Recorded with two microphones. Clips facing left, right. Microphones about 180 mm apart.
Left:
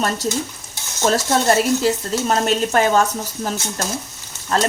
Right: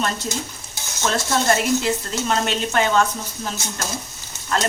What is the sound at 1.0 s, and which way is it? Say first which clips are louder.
Speech: left 4 dB; 35° left (ahead or behind).